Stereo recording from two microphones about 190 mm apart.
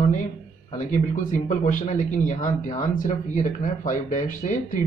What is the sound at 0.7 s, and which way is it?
A man's voice, 40° left (ahead or behind).